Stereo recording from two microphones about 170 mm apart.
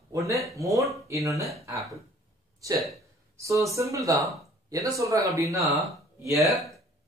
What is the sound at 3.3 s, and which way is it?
Speech, 20° right (ahead or behind).